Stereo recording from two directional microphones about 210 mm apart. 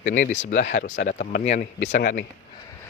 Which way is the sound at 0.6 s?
60° left (ahead or behind).